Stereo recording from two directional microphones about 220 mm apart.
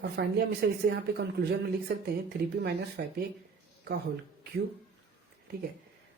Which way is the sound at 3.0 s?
45° right (ahead or behind).